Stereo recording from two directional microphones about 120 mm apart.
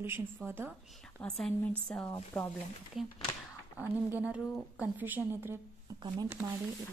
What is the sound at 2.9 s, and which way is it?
Speech, centre (ahead or behind).